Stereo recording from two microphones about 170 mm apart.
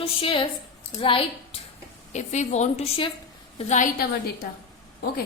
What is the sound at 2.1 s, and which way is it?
A woman's voice, 45° left (ahead or behind).